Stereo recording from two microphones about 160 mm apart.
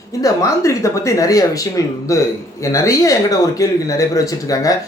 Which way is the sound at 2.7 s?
20° left (ahead or behind).